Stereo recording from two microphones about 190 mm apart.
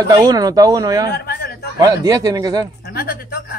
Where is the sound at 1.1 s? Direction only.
55° left (ahead or behind).